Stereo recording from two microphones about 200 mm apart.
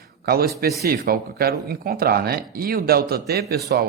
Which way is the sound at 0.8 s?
50° right (ahead or behind).